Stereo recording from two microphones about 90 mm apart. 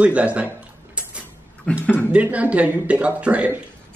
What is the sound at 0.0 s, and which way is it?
Speech, 15° right (ahead or behind).